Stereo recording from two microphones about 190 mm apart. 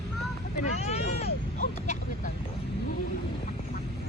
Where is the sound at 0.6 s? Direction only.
35° left (ahead or behind).